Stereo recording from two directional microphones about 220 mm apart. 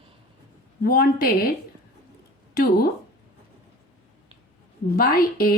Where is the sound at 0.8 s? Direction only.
45° left (ahead or behind).